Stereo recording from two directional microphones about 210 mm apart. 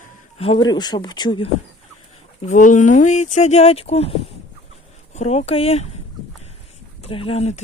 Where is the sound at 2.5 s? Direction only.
35° left (ahead or behind).